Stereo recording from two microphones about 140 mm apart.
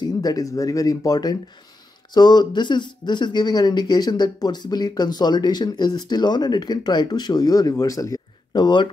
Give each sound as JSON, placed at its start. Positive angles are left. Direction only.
{"t": 0.0, "sound": "speech", "side_deg": 25}